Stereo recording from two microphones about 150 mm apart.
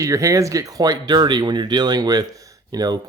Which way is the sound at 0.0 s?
20° right (ahead or behind).